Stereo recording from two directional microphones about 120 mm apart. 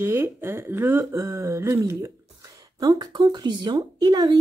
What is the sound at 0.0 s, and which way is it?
Speech, 20° right (ahead or behind).